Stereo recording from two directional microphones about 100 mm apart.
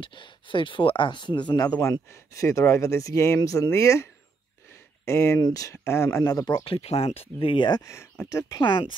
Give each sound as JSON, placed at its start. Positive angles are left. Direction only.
{"t": 0.0, "sound": "speech", "side_deg": 55}
{"t": 1.7, "sound": "speech", "side_deg": 30}
{"t": 6.2, "sound": "speech", "side_deg": 40}
{"t": 6.6, "sound": "speech", "side_deg": 80}
{"t": 7.8, "sound": "speech", "side_deg": 30}
{"t": 8.6, "sound": "speech", "side_deg": 55}